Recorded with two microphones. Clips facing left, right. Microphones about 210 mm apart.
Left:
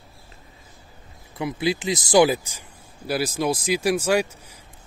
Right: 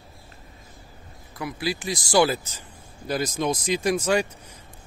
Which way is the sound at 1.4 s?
20° left (ahead or behind).